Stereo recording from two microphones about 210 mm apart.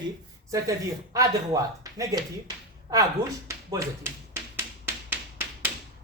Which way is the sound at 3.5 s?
15° right (ahead or behind).